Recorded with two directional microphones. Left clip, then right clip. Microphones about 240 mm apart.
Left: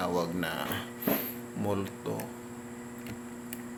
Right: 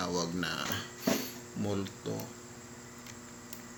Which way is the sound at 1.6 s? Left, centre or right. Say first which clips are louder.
Left 3 dB; centre.